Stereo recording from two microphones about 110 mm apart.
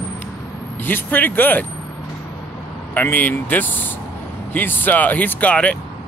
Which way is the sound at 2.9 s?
15° left (ahead or behind).